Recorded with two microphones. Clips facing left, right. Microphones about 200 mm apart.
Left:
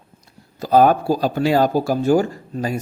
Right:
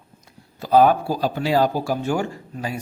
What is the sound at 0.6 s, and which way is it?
Speech, 45° left (ahead or behind).